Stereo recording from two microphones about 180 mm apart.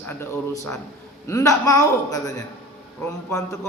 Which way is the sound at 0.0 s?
15° left (ahead or behind).